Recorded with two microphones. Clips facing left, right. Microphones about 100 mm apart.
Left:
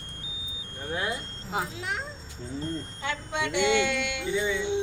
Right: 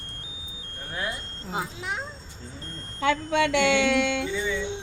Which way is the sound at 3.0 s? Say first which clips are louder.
Right 10 dB; 90° right.